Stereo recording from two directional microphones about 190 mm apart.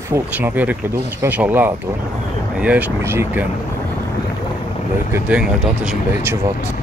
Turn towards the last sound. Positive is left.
turn(degrees=-5)  # may be behind; listen again after turning